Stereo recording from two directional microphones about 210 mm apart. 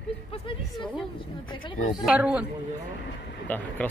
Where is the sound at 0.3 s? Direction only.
25° left (ahead or behind).